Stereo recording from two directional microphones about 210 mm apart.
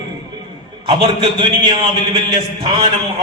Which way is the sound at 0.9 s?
20° right (ahead or behind).